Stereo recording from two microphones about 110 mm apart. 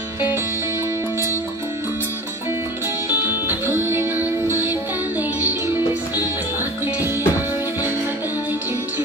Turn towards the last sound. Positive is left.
turn(degrees=-20)  # may be behind; listen again after turning